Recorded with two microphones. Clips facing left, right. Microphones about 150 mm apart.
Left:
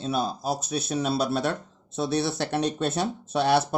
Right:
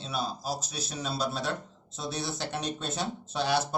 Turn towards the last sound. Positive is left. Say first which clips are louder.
# left 6 dB
turn(degrees=60)  # may be behind; listen again after turning